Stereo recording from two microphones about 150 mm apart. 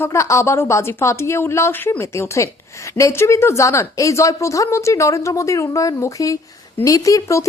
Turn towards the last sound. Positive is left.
turn(degrees=20)  # may be behind; listen again after turning